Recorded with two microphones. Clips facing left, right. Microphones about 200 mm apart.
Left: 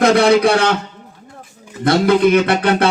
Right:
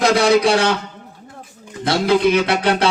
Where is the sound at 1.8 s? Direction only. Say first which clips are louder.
Left 3 dB; 55° left (ahead or behind).